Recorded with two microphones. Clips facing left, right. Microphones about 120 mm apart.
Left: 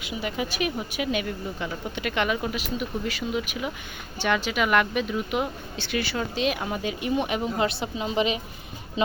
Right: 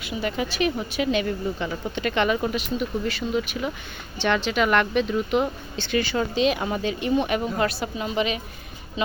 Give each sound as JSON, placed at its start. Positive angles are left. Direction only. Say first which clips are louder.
{"t": 0.0, "sound": "speech", "louder": "right 3 dB", "side_deg": 15}
{"t": 6.8, "sound": "a woman's voice", "louder": "right 3 dB", "side_deg": 15}